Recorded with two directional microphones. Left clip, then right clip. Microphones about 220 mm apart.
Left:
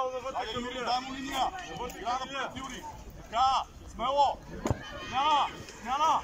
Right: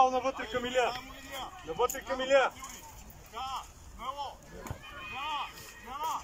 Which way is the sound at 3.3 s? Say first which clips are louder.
Left 12 dB; 45° left (ahead or behind).